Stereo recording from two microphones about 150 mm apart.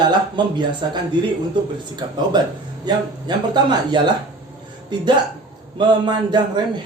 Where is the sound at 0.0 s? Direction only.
30° right (ahead or behind).